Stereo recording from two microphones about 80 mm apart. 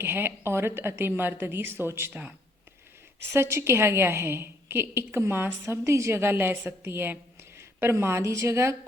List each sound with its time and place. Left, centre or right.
0.0 s a woman's voice: right
3.2 s a woman's voice: right